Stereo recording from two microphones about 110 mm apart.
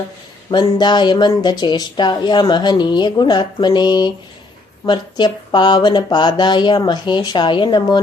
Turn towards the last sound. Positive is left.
turn(degrees=45)  # may be behind; listen again after turning